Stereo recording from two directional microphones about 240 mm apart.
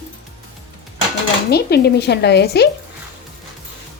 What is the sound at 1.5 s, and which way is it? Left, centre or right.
Speech, left.